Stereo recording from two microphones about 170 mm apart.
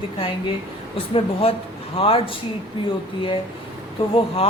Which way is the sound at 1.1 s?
35° left (ahead or behind).